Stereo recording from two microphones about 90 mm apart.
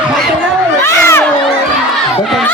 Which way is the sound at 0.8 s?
30° left (ahead or behind).